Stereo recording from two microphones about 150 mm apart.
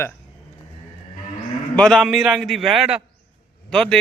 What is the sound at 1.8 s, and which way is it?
A man's voice, 5° left (ahead or behind).